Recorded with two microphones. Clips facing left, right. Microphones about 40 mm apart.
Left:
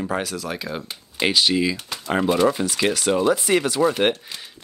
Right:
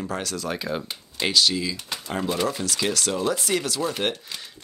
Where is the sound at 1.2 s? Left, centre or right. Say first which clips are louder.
Left 3 dB; left.